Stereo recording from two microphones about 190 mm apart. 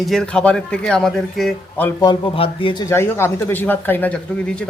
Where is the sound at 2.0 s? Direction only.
25° left (ahead or behind).